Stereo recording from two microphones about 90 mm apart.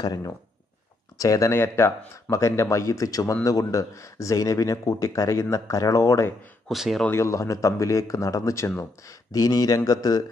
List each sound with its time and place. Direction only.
0.0 s speech: 45° left (ahead or behind)
1.5 s speech: 25° left (ahead or behind)
6.7 s speech: centre (ahead or behind)
7.1 s speech: 30° left (ahead or behind)
9.3 s speech: 45° left (ahead or behind)